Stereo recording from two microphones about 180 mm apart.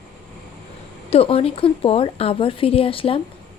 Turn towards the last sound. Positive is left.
turn(degrees=30)  # may be behind; listen again after turning